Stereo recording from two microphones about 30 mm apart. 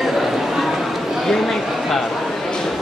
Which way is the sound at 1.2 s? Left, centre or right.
Centre.